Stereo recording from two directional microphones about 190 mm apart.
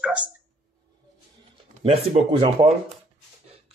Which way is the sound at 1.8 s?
30° right (ahead or behind).